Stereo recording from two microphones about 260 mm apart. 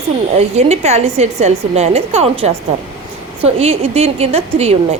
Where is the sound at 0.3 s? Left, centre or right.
Right.